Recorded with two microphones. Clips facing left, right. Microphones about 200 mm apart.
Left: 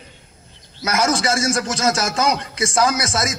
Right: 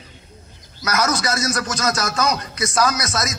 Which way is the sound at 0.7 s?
25° left (ahead or behind).